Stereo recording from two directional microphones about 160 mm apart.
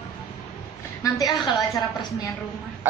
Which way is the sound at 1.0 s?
25° left (ahead or behind).